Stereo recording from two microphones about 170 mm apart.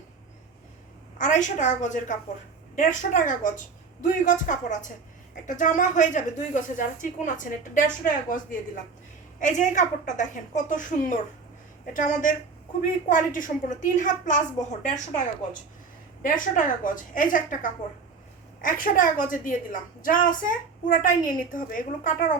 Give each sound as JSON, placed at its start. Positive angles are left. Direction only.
{"t": 1.2, "sound": "a woman's voice", "side_deg": 45}